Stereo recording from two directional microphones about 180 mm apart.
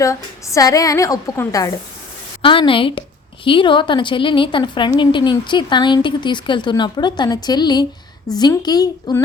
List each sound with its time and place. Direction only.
0.0 s a woman's voice: 15° left (ahead or behind)
2.4 s a woman's voice: 30° left (ahead or behind)